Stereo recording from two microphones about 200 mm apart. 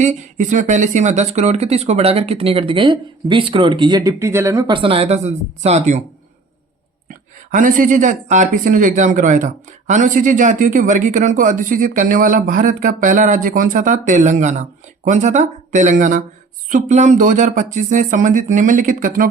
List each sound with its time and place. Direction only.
0.0 s speech: 40° right (ahead or behind)
7.1 s a woman's voice: 40° right (ahead or behind)